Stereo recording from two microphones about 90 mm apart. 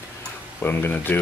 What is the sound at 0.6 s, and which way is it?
Speech, 25° left (ahead or behind).